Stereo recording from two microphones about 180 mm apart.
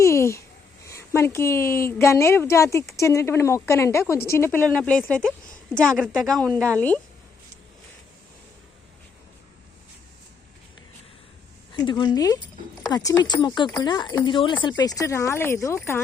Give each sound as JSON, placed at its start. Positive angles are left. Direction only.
{"t": 0.0, "sound": "a sound", "side_deg": 15}
{"t": 0.9, "sound": "a woman's voice", "side_deg": 15}
{"t": 11.7, "sound": "speech", "side_deg": 25}